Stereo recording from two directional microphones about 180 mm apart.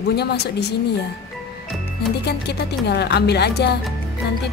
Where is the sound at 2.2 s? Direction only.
70° left (ahead or behind).